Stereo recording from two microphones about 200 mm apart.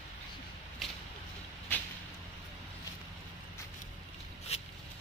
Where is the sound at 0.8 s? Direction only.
Centre (ahead or behind).